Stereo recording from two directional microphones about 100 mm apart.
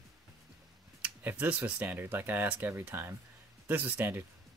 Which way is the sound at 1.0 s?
15° right (ahead or behind).